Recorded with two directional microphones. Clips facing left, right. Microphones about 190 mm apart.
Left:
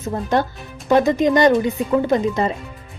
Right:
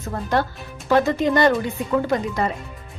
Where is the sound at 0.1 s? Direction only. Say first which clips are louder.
Left 3 dB; 20° left (ahead or behind).